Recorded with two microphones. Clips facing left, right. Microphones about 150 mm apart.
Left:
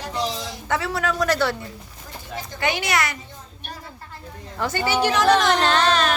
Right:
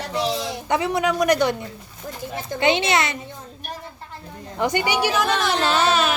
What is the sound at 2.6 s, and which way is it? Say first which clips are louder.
Speech: right 4 dB; 20° right (ahead or behind).